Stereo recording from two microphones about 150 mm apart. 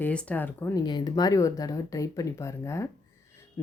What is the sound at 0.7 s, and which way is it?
Speech, 30° left (ahead or behind).